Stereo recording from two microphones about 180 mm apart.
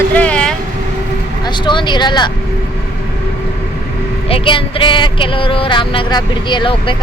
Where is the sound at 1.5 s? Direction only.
25° left (ahead or behind).